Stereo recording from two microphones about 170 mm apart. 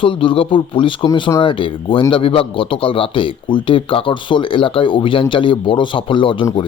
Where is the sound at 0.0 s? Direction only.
30° left (ahead or behind).